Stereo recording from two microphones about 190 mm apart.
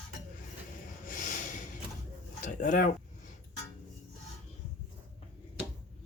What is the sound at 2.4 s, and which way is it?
Speech, 45° left (ahead or behind).